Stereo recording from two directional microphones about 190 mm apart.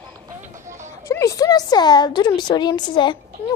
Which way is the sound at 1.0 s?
15° left (ahead or behind).